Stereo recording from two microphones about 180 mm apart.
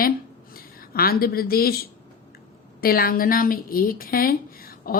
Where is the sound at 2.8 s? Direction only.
55° left (ahead or behind).